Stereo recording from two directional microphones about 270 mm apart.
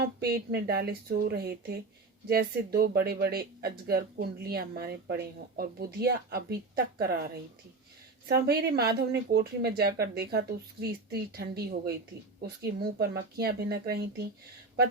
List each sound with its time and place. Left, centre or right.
0.0 s speech: right
8.3 s speech: right